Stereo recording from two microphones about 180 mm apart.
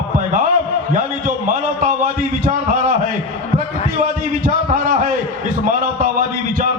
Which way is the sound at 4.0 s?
50° right (ahead or behind).